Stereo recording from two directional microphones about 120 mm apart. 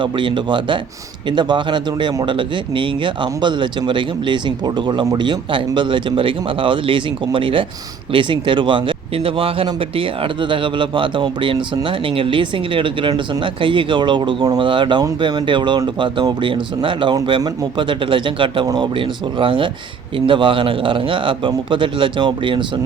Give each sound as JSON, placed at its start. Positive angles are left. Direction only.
{"t": 0.0, "sound": "speech", "side_deg": -40}